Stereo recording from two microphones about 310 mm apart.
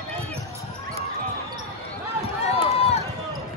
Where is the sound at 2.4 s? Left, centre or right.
Centre.